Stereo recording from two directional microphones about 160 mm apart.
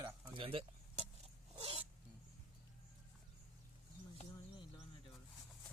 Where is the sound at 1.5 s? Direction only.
35° right (ahead or behind).